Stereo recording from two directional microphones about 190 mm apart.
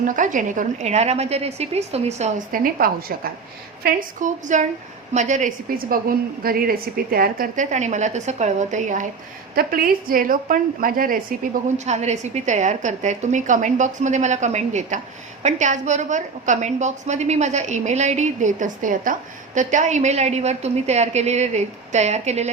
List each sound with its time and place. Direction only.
0.0 s a woman's voice: 40° right (ahead or behind)
11.9 s a woman's voice: 35° right (ahead or behind)